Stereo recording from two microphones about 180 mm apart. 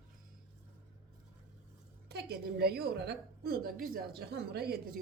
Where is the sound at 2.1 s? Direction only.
65° right (ahead or behind).